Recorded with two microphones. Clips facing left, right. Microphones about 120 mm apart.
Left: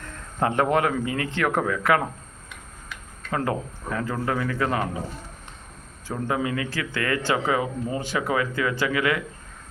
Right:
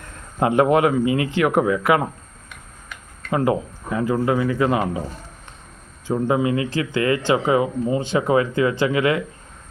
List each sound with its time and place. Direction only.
0.3 s speech: 15° right (ahead or behind)
3.3 s speech: 15° right (ahead or behind)
6.1 s a man's voice: 20° right (ahead or behind)